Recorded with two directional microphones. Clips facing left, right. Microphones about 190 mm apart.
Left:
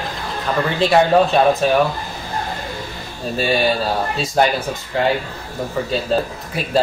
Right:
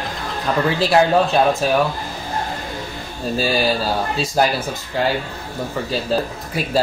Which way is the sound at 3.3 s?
Centre (ahead or behind).